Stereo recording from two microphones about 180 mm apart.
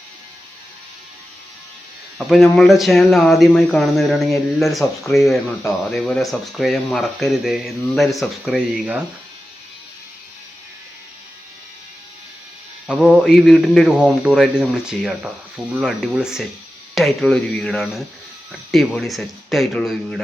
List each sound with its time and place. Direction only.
2.1 s speech: centre (ahead or behind)
5.9 s speech: centre (ahead or behind)
12.9 s speech: centre (ahead or behind)